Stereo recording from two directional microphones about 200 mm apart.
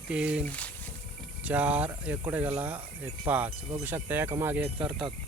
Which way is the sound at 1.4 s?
5° right (ahead or behind).